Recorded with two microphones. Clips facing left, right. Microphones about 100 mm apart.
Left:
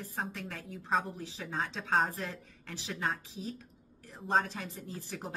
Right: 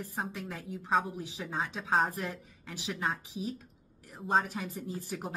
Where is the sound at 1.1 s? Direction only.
15° right (ahead or behind).